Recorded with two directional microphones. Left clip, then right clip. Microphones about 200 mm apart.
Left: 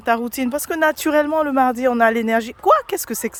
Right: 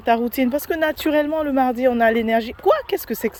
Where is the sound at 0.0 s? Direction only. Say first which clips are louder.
Right 1 dB; 10° left (ahead or behind).